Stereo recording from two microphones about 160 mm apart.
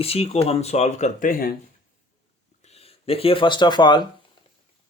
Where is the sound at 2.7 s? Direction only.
40° left (ahead or behind).